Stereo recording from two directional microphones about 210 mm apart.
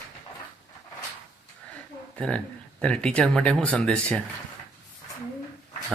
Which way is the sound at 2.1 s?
5° left (ahead or behind).